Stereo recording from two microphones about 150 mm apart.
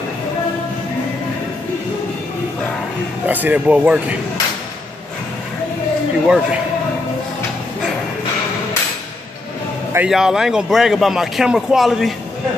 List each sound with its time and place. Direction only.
3.3 s speech: 10° right (ahead or behind)
6.2 s a man's voice: 5° right (ahead or behind)
9.9 s a man's voice: 5° right (ahead or behind)